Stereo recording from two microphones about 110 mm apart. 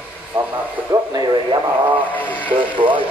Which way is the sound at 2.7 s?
50° right (ahead or behind).